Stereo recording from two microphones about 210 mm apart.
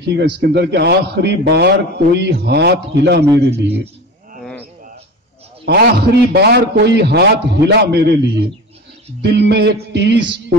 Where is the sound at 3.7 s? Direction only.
45° right (ahead or behind).